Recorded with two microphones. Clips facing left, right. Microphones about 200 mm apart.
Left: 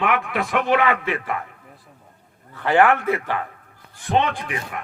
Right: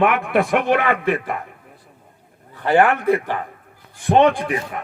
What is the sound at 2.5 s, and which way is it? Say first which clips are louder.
Speech: right 1 dB; 15° right (ahead or behind).